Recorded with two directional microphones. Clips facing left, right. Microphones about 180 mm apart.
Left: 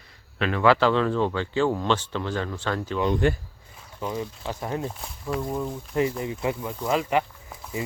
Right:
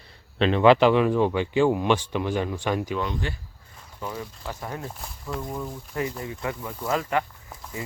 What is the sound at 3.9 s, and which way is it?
Speech, 15° left (ahead or behind).